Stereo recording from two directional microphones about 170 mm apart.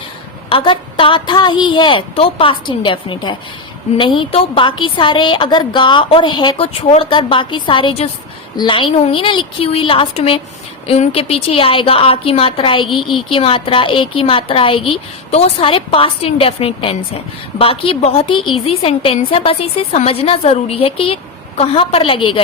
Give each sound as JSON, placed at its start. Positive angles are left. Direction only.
{"t": 0.5, "sound": "a woman's voice", "side_deg": 30}